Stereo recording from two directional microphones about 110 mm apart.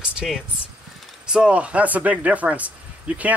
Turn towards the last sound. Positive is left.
turn(degrees=-15)  # may be behind; listen again after turning